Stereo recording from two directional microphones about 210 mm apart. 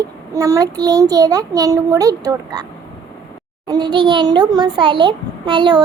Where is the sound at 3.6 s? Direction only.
20° right (ahead or behind).